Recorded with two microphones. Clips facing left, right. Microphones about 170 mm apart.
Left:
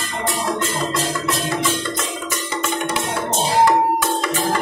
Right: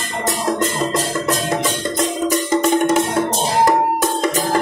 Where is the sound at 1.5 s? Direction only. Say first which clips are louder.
Right 2 dB; 40° right (ahead or behind).